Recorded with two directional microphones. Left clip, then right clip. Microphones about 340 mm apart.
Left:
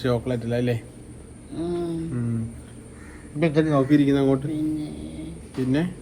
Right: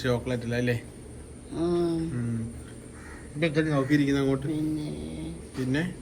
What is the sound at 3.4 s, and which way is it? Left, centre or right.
Speech, centre.